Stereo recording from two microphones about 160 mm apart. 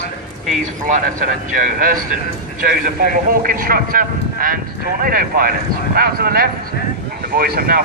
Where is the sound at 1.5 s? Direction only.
55° right (ahead or behind).